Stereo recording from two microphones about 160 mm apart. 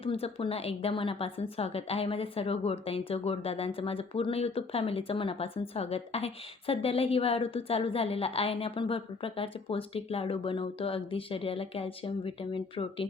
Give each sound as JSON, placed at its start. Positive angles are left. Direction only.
{"t": 0.0, "sound": "a woman's voice", "side_deg": 35}